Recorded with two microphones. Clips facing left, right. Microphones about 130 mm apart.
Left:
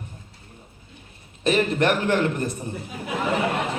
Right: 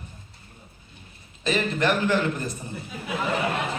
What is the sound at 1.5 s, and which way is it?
A man's voice, 60° left (ahead or behind).